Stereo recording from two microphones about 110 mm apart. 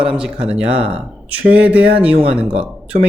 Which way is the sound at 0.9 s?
10° right (ahead or behind).